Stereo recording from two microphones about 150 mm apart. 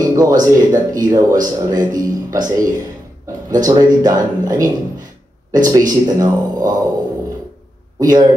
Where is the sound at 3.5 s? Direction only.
25° right (ahead or behind).